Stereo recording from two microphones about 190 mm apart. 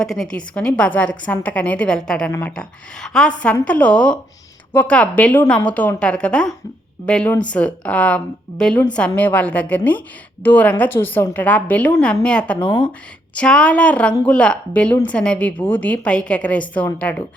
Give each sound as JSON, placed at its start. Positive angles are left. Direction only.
{"t": 0.0, "sound": "a woman's voice", "side_deg": 0}
{"t": 12.5, "sound": "speech", "side_deg": 25}
{"t": 13.3, "sound": "a woman's voice", "side_deg": 5}